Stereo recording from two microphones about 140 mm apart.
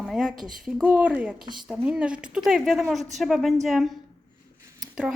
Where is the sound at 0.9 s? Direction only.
10° right (ahead or behind).